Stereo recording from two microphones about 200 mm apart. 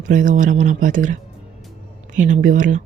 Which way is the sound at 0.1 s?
40° right (ahead or behind).